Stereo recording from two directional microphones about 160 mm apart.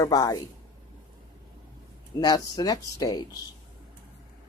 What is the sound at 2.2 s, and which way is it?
Speech, 25° left (ahead or behind).